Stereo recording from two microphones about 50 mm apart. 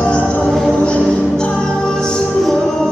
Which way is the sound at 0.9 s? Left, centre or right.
Centre.